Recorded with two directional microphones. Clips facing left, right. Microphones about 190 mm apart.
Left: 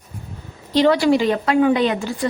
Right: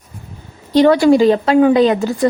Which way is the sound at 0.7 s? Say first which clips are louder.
Right 5 dB; 50° right (ahead or behind).